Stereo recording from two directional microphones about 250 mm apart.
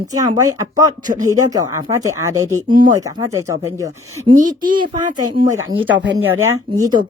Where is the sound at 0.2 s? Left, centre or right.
Centre.